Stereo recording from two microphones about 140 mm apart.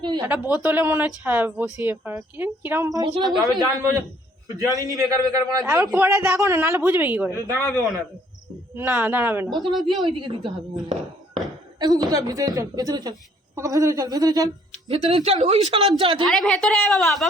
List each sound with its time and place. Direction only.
0.0 s a woman's voice: 35° right (ahead or behind)
0.3 s a woman's voice: 10° right (ahead or behind)
7.5 s a man's voice: 15° left (ahead or behind)
8.7 s speech: 15° right (ahead or behind)
9.7 s a woman's voice: centre (ahead or behind)
10.0 s a woman's voice: 35° right (ahead or behind)
11.8 s a woman's voice: 30° right (ahead or behind)
14.8 s speech: 45° right (ahead or behind)
16.2 s a woman's voice: centre (ahead or behind)